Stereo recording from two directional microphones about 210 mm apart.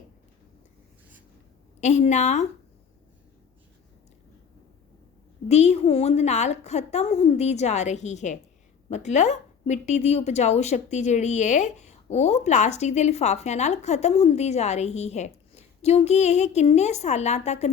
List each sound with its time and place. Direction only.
1.8 s a woman's voice: 35° left (ahead or behind)
5.5 s a woman's voice: 30° left (ahead or behind)